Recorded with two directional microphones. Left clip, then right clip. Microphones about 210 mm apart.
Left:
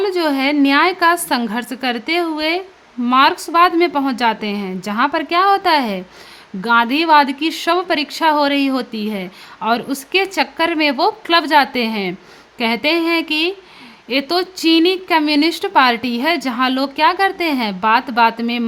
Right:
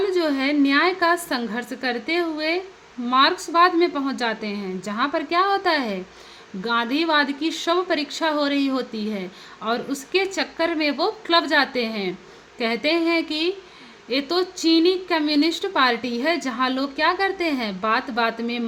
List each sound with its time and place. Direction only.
0.0 s a woman's voice: 35° left (ahead or behind)